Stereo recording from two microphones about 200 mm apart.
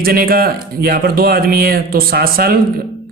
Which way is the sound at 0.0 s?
50° right (ahead or behind).